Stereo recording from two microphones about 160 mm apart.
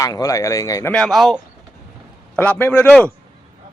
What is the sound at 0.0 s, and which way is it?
Speech, 20° left (ahead or behind).